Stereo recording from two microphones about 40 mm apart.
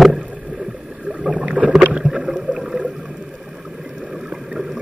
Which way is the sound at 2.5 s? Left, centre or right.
Centre.